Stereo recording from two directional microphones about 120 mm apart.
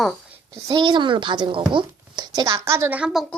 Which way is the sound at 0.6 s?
40° right (ahead or behind).